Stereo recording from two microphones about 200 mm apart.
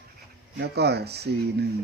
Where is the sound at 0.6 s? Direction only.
55° right (ahead or behind).